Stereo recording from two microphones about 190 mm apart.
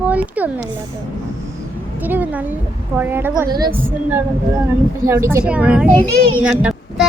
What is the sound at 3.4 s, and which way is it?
Speech, 20° right (ahead or behind).